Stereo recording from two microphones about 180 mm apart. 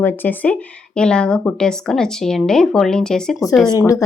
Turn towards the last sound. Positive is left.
turn(degrees=20)  # may be behind; listen again after turning